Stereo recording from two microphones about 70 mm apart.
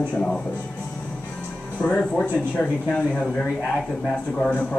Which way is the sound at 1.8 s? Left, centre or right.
Centre.